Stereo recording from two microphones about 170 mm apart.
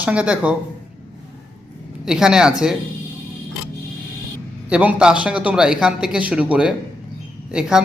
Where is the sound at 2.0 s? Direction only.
5° right (ahead or behind).